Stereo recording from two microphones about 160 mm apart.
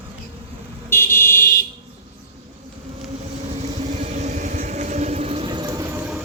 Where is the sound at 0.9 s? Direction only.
15° left (ahead or behind).